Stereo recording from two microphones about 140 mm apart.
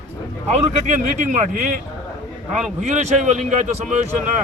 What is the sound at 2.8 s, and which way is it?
A man's voice, 60° right (ahead or behind).